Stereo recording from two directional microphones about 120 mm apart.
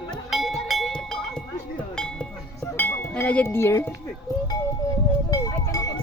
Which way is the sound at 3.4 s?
20° left (ahead or behind).